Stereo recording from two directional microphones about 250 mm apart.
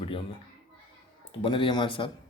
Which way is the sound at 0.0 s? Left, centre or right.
Left.